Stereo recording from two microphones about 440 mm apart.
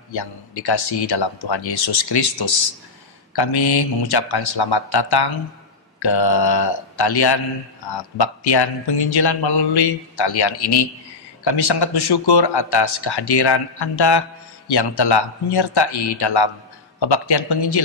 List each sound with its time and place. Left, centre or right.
0.1 s a man's voice: left
3.3 s a man's voice: left